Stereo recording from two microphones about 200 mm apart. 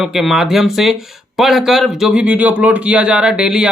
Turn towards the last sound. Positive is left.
turn(degrees=-5)  # may be behind; listen again after turning